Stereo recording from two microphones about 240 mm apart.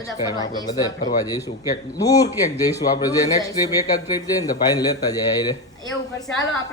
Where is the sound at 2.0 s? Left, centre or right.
Centre.